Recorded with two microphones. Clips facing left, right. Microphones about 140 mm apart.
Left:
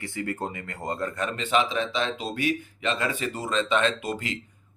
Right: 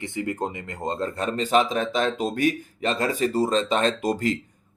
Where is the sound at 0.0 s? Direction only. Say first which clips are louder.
Right 3 dB; 20° right (ahead or behind).